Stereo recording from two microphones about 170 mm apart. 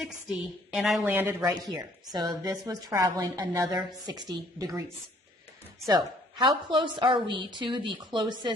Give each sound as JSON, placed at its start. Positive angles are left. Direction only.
{"t": 0.0, "sound": "a woman's voice", "side_deg": -5}
{"t": 1.4, "sound": "a woman's voice", "side_deg": -25}
{"t": 5.8, "sound": "a woman's voice", "side_deg": -25}